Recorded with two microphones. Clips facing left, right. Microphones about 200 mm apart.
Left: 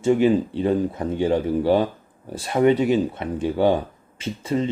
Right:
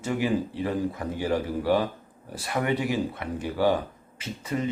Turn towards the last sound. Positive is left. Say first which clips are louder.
# left 6 dB
turn(degrees=30)  # may be behind; listen again after turning